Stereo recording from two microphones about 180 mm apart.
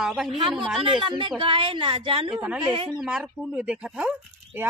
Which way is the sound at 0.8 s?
25° right (ahead or behind).